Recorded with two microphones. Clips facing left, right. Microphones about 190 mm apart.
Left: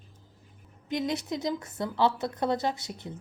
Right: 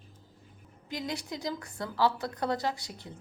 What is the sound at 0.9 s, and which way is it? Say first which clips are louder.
A woman's voice: left 6 dB; 20° left (ahead or behind).